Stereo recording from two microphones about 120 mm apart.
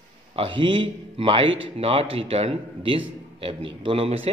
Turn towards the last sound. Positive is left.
turn(degrees=-50)  # may be behind; listen again after turning